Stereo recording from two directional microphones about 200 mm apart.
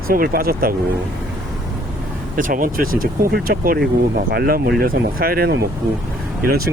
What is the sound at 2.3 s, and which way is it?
Speech, 45° right (ahead or behind).